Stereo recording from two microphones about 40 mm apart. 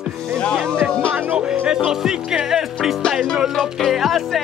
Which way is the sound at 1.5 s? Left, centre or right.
Centre.